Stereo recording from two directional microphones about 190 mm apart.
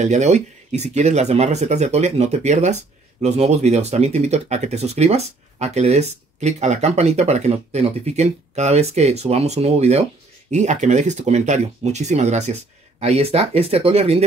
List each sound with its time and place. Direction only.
0.0 s speech: 35° right (ahead or behind)